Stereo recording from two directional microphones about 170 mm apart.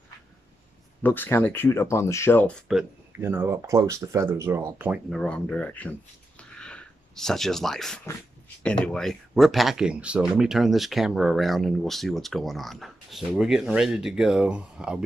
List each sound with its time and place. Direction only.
1.0 s speech: 10° left (ahead or behind)
3.2 s speech: 15° right (ahead or behind)
5.1 s speech: 5° left (ahead or behind)